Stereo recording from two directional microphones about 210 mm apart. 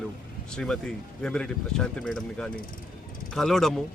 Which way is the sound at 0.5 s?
5° left (ahead or behind).